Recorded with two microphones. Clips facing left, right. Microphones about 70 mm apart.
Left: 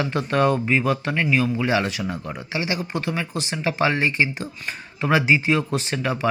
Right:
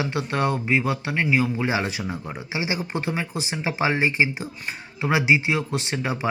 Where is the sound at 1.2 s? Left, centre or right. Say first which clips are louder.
Right 1 dB; centre.